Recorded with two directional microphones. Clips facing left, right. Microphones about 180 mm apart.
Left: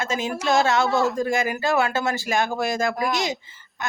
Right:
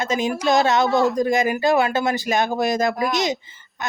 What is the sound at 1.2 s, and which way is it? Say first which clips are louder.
A woman's voice: right 4 dB; 20° right (ahead or behind).